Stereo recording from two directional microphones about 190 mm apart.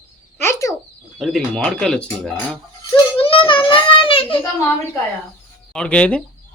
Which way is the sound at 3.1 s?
25° left (ahead or behind).